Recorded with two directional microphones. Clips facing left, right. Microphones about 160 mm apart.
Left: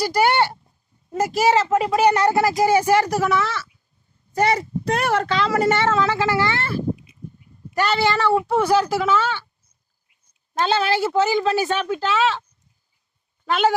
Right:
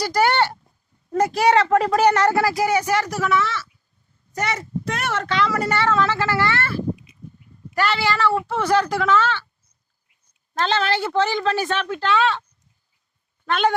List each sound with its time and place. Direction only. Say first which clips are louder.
0.0 s speech: left 1 dB; 10° left (ahead or behind)
4.4 s speech: left 6 dB; 35° left (ahead or behind); by 6.7 s 20° left (ahead or behind)
7.8 s speech: left 1 dB; 20° left (ahead or behind)
10.5 s speech: left 1 dB; 10° left (ahead or behind)